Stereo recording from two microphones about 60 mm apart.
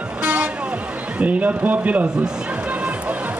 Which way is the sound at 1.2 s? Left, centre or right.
Right.